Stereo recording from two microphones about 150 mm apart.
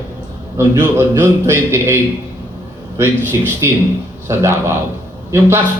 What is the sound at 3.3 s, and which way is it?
A man's voice, 15° right (ahead or behind).